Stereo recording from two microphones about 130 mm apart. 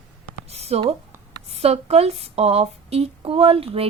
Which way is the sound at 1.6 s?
50° right (ahead or behind).